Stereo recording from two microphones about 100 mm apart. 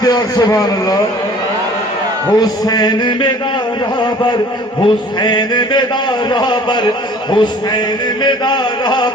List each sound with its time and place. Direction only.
0.0 s a man's voice: 40° left (ahead or behind)
2.4 s a man's voice: 45° left (ahead or behind)